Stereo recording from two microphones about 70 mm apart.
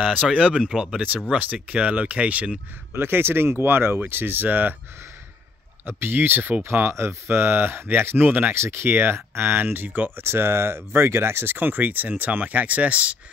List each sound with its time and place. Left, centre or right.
0.0 s speech: centre
1.3 s speech: centre
2.9 s speech: right
5.9 s speech: right